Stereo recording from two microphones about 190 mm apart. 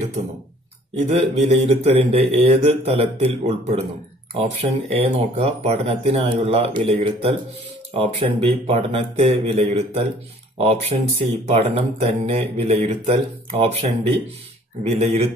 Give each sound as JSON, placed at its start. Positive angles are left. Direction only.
{"t": 0.9, "sound": "speech", "side_deg": -35}